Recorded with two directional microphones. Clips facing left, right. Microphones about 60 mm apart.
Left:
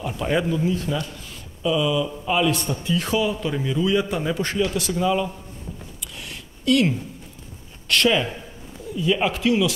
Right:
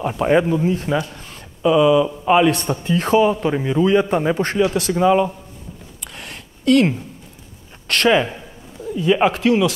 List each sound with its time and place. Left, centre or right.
0.0 s a man's voice: right
6.1 s a sound: right
7.9 s a man's voice: right